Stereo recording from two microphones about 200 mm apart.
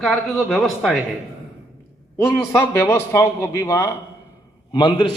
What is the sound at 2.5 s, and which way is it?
A man's voice, 10° left (ahead or behind).